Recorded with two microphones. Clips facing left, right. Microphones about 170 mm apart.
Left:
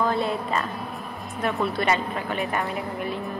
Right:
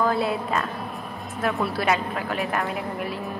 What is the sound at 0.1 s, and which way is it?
A woman's voice, 5° right (ahead or behind).